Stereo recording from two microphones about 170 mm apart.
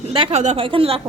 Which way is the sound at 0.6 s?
35° right (ahead or behind).